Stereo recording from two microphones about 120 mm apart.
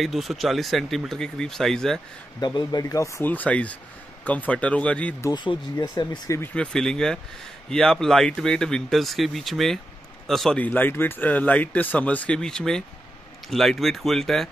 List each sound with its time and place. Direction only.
0.0 s speech: centre (ahead or behind)
2.4 s speech: 35° left (ahead or behind)
3.3 s speech: 10° left (ahead or behind)
5.3 s speech: 40° left (ahead or behind)
6.4 s speech: 10° left (ahead or behind)
10.6 s speech: 15° left (ahead or behind)